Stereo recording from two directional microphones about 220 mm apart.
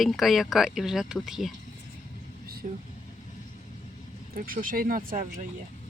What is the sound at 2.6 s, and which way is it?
Speech, 35° right (ahead or behind).